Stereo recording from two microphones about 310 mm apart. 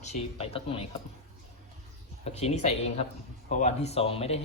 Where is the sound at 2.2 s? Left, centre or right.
Left.